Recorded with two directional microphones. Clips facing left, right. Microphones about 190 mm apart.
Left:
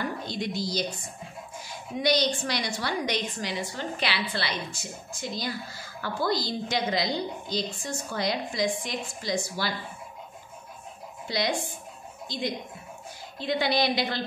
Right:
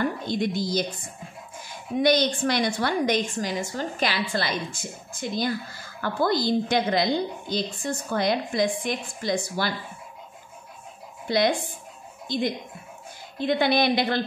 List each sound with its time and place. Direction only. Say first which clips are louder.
0.3 s a woman's voice: right 5 dB; 50° right (ahead or behind)
2.0 s a woman's voice: right 4 dB; 55° right (ahead or behind)
11.2 s a woman's voice: right 6 dB; 55° right (ahead or behind)